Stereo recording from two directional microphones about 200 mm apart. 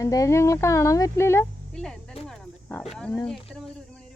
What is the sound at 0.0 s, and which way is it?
Speech, 15° left (ahead or behind).